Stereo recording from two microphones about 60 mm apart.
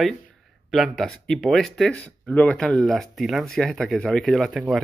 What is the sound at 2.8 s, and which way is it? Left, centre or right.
Speech, centre.